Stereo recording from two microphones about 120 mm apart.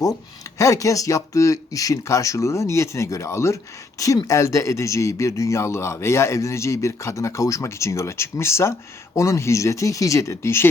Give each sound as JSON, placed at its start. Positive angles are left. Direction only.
{"t": 0.6, "sound": "speech", "side_deg": 25}